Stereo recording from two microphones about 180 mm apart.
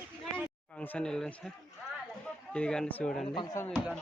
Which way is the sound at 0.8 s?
10° left (ahead or behind).